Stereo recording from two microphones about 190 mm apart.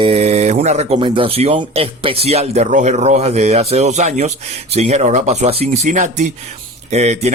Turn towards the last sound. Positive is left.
turn(degrees=-35)  # may be behind; listen again after turning